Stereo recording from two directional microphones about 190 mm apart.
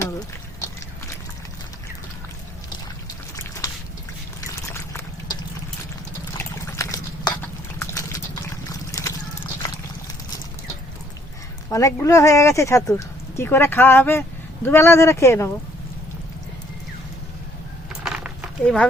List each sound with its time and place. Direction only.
4.4 s pour: 15° left (ahead or behind)
6.3 s liquid: 15° left (ahead or behind)
7.4 s a sound: 15° left (ahead or behind)
8.7 s horse: 15° left (ahead or behind)
11.7 s speech: 15° left (ahead or behind)
18.0 s horse: 5° right (ahead or behind)
18.6 s speech: 5° left (ahead or behind)